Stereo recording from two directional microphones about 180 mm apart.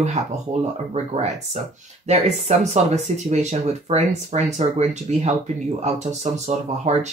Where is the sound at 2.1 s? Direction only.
35° right (ahead or behind).